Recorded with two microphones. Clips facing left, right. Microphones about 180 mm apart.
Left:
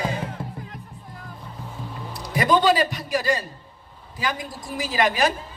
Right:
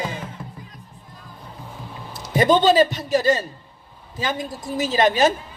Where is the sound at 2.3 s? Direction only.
25° right (ahead or behind).